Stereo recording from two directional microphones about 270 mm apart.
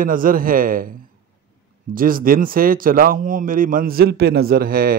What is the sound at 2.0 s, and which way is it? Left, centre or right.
A man's voice, right.